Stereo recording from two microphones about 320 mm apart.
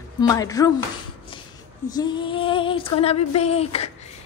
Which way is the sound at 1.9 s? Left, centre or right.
Centre.